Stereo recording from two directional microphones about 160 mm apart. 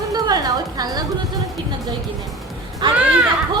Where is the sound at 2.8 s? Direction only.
30° right (ahead or behind).